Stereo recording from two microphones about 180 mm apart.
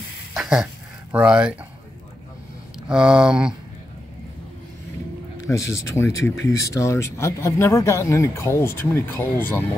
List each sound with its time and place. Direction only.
0.3 s a sound: 5° right (ahead or behind)
1.1 s speech: 5° right (ahead or behind)
2.9 s speech: 5° right (ahead or behind)
5.5 s speech: 15° left (ahead or behind)